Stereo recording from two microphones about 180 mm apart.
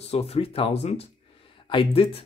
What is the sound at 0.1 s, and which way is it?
Speech, 35° left (ahead or behind).